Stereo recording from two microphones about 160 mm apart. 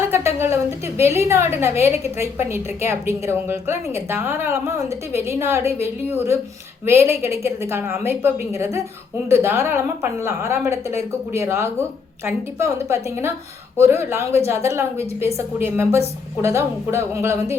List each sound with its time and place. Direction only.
0.1 s a woman's voice: 15° right (ahead or behind)